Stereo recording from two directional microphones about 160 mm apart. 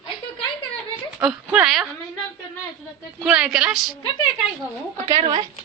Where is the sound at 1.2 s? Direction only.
5° right (ahead or behind).